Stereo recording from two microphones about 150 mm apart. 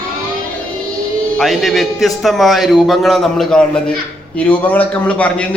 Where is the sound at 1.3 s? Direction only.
Centre (ahead or behind).